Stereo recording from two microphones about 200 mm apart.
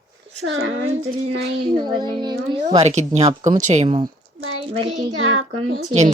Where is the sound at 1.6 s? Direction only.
20° right (ahead or behind).